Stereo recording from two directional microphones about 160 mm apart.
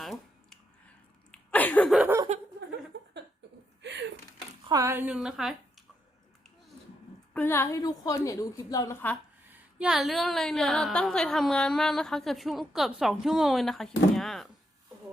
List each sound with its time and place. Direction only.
0.0 s a sound: centre (ahead or behind)
1.9 s laughter: 5° right (ahead or behind)
2.9 s a sound: 90° right
4.7 s a woman's voice: 20° right (ahead or behind); by 5.5 s centre (ahead or behind)
7.3 s a woman's voice: 15° left (ahead or behind)
9.5 s a woman's voice: 5° right (ahead or behind)